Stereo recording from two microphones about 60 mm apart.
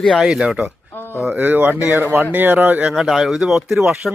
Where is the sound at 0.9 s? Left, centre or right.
Left.